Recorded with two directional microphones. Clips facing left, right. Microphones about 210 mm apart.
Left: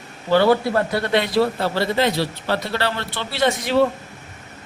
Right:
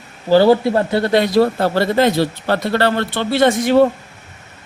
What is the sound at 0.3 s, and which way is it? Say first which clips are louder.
Speech: right 5 dB; 30° right (ahead or behind).